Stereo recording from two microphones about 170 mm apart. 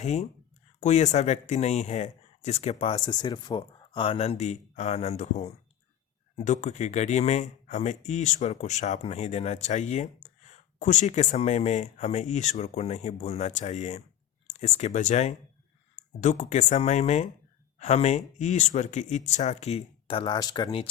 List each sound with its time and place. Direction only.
0.0 s speech: 40° left (ahead or behind); by 20.8 s 25° left (ahead or behind)